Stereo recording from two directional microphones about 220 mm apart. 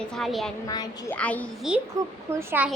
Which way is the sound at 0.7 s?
15° left (ahead or behind).